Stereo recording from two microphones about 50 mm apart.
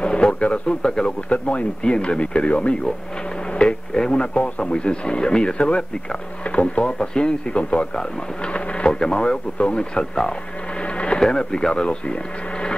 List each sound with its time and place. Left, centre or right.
0.0 s speech: left
10.8 s printer: left
11.1 s speech: centre